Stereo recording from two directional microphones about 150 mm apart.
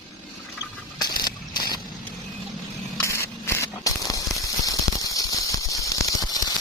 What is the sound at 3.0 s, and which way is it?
Spray, 15° left (ahead or behind).